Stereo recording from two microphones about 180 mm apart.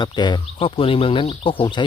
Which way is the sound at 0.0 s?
25° left (ahead or behind).